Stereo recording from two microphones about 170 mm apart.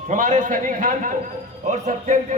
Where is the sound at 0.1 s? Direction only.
50° right (ahead or behind).